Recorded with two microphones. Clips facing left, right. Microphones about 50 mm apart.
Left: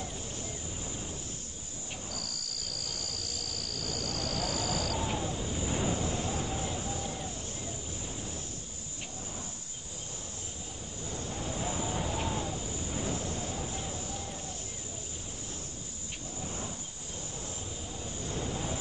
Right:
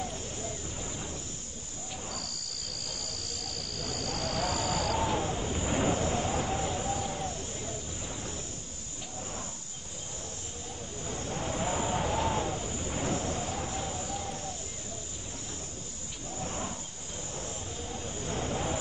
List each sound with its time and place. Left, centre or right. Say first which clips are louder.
3.8 s cricket: right 2 dB; right
5.1 s vehicle: right 3 dB; right
11.1 s vehicle: right 3 dB; right
13.8 s a sound: right 3 dB; right
16.3 s wild animals: right 4 dB; right
17.9 s vehicle: right 3 dB; right